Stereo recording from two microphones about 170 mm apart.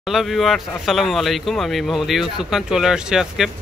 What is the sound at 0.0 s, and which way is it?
Speech, centre (ahead or behind).